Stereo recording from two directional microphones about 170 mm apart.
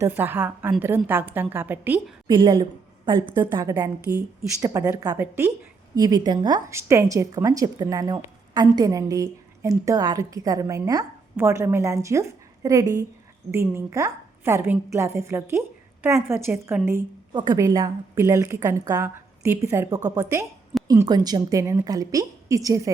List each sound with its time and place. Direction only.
0.0 s a woman's voice: 10° right (ahead or behind)
2.2 s a woman's voice: 25° right (ahead or behind)